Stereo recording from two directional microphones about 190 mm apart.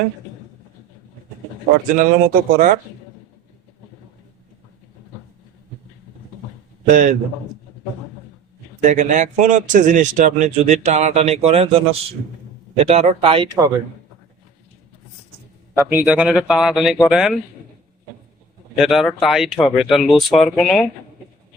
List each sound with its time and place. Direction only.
2.0 s speech: 45° right (ahead or behind)
6.9 s a man's voice: 40° right (ahead or behind)
8.8 s a man's voice: 40° right (ahead or behind)
15.9 s speech: 10° right (ahead or behind)
18.8 s speech: centre (ahead or behind)